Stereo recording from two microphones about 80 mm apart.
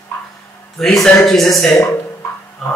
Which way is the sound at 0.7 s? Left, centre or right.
Centre.